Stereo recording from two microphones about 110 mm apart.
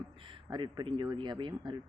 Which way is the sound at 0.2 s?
45° right (ahead or behind).